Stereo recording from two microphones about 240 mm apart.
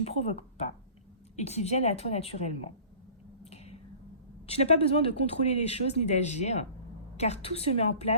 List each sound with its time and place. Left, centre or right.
0.0 s speech: left
3.4 s a sound: left
4.4 s speech: left